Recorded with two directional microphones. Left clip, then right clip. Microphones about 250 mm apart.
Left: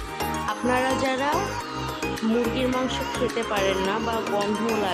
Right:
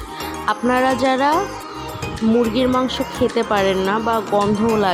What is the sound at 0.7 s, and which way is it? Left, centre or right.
Speech, centre.